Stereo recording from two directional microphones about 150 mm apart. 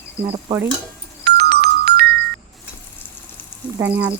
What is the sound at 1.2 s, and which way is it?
Music, 90° right.